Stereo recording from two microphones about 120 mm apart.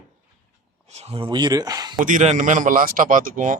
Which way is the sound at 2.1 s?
90° right.